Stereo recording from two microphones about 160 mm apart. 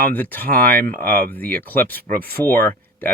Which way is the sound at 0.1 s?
10° left (ahead or behind).